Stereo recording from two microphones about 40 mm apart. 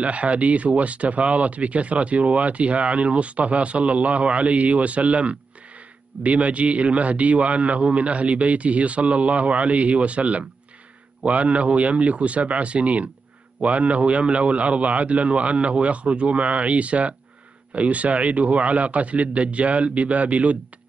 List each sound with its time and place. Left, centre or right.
0.0 s speech: right